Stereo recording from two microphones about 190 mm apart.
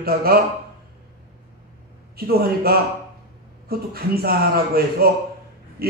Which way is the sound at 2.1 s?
55° right (ahead or behind).